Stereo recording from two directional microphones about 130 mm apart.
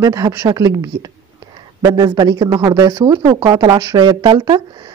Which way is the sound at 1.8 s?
30° right (ahead or behind).